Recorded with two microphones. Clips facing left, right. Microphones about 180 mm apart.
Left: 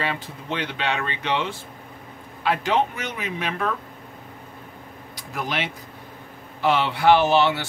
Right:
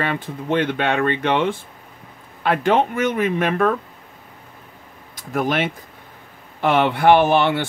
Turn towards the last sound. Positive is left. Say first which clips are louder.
# right 3 dB
turn(degrees=-55)  # may be behind; listen again after turning